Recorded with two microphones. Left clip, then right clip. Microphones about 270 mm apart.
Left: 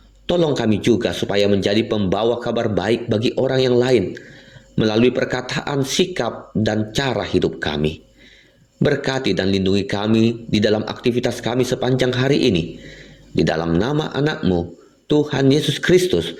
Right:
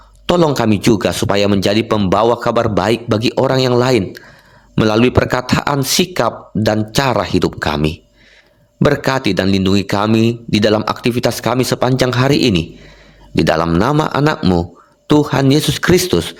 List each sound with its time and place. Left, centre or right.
0.3 s a man's voice: right